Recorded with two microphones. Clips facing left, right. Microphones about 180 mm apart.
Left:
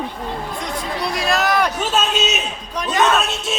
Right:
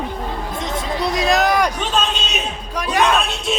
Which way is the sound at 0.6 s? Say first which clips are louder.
Right 5 dB; 20° right (ahead or behind).